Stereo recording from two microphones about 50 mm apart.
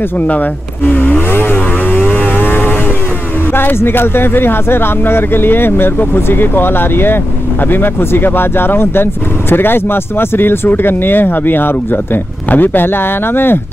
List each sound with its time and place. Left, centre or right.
0.8 s vehicle: left
3.5 s speech: left